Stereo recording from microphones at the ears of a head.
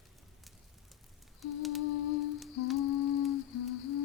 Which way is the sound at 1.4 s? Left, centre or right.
Left.